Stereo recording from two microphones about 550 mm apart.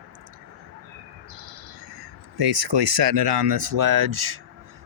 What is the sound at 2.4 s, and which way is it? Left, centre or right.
Speech, right.